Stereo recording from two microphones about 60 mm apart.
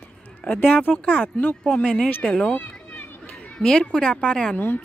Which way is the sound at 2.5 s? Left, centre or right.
Left.